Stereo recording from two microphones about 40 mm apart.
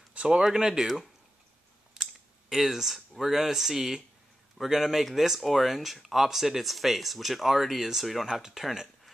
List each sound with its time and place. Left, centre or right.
0.1 s a sound: right
0.4 s speech: centre
2.5 s speech: centre
8.3 s speech: centre